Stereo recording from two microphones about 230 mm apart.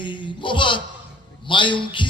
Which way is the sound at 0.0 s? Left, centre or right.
Left.